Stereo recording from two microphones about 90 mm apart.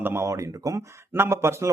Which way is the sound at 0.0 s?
30° right (ahead or behind).